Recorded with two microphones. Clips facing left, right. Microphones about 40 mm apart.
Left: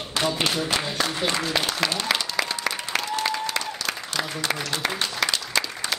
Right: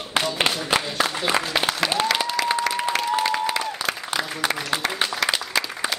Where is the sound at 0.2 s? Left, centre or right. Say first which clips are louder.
Right 1 dB; right.